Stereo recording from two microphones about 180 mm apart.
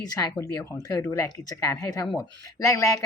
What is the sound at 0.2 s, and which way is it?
A woman's voice, 20° left (ahead or behind).